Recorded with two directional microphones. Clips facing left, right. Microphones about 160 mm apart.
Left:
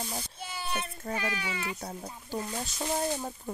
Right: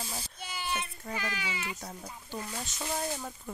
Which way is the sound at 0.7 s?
55° left (ahead or behind).